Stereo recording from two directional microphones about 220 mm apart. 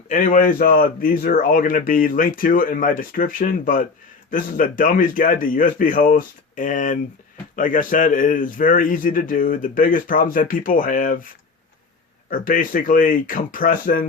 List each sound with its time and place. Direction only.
0.1 s speech: 35° left (ahead or behind)
12.3 s speech: 40° left (ahead or behind)